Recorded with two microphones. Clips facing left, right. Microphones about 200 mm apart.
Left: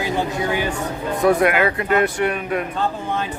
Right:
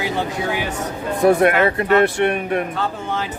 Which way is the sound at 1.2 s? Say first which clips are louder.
Right 2 dB; 30° right (ahead or behind).